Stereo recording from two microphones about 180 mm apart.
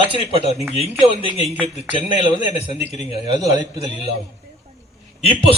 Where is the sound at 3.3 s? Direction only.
20° right (ahead or behind).